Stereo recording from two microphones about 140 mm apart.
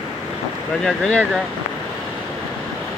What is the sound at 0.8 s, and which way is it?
Speech, 5° left (ahead or behind).